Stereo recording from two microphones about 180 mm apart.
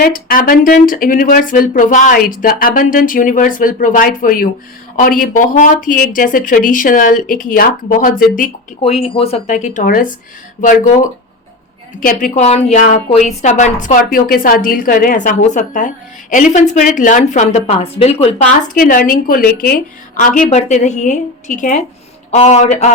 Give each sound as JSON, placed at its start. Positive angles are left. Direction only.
{"t": 0.0, "sound": "speech", "side_deg": 50}
{"t": 8.8, "sound": "a woman's voice", "side_deg": 35}
{"t": 18.8, "sound": "a woman's voice", "side_deg": 50}